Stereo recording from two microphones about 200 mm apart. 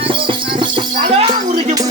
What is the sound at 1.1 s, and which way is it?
Music, 30° right (ahead or behind).